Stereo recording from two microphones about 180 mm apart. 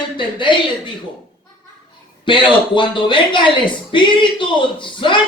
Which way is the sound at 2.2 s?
25° left (ahead or behind).